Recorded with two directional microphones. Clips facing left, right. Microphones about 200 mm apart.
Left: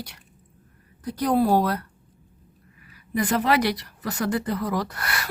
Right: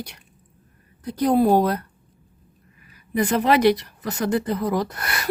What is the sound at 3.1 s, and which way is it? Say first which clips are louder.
Speech: right 3 dB; 20° right (ahead or behind).